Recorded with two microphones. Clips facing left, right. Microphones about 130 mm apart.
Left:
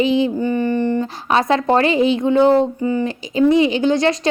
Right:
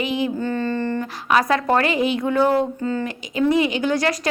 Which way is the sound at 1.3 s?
25° left (ahead or behind).